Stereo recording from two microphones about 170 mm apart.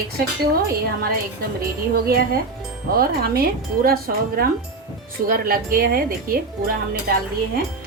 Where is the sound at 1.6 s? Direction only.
60° right (ahead or behind).